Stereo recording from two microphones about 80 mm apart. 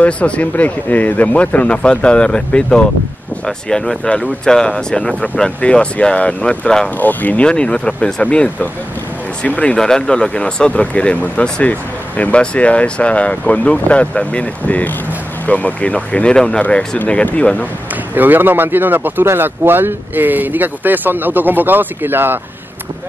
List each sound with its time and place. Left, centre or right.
0.0 s speech: centre
9.6 s speech: centre
18.1 s speech: right